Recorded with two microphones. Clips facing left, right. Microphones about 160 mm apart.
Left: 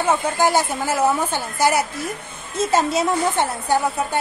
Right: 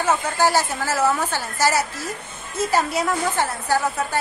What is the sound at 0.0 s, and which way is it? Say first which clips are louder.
A woman's voice: left 1 dB; 15° left (ahead or behind).